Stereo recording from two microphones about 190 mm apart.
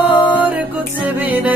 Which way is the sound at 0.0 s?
5° right (ahead or behind).